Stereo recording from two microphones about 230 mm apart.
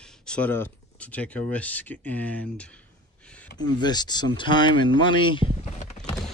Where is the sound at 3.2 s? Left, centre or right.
Centre.